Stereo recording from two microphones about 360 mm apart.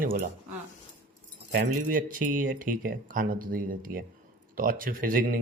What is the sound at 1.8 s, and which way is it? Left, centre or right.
A woman's voice, right.